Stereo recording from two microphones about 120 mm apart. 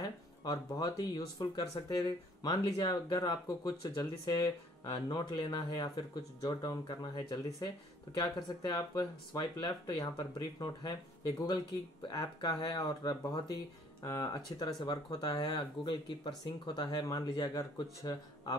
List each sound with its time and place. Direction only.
0.4 s speech: 30° left (ahead or behind)
12.1 s speech: 35° left (ahead or behind)